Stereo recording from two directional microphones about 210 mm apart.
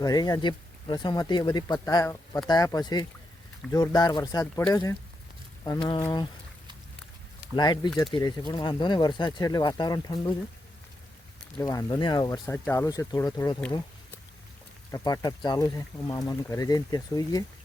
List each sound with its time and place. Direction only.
0.0 s speech: 20° left (ahead or behind)
7.5 s speech: 20° left (ahead or behind)
11.6 s speech: 15° left (ahead or behind)
14.8 s speech: 15° left (ahead or behind)